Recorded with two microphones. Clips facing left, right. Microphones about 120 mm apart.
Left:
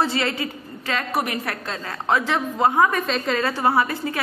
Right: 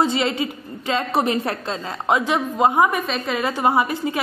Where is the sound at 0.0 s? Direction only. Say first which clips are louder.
Right 3 dB; 20° right (ahead or behind).